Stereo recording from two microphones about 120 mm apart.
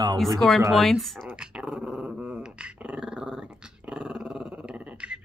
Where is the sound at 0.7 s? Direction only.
Centre (ahead or behind).